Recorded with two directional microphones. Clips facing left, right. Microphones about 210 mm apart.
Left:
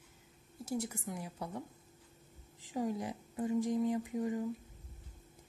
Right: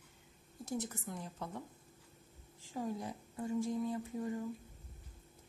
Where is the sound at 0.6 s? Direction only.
10° left (ahead or behind).